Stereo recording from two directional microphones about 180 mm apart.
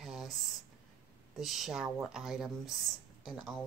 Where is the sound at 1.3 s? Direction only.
Centre (ahead or behind).